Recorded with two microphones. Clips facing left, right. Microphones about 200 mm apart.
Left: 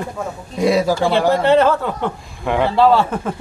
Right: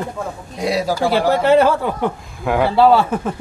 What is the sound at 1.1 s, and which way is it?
Speech, 5° right (ahead or behind).